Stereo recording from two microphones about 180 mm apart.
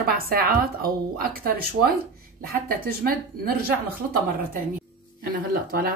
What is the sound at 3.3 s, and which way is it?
Speech, 60° right (ahead or behind).